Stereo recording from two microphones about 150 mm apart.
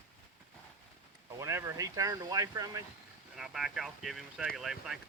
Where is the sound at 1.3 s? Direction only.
20° right (ahead or behind).